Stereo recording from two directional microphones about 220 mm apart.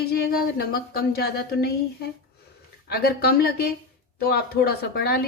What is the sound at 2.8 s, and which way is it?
Speech, 45° left (ahead or behind).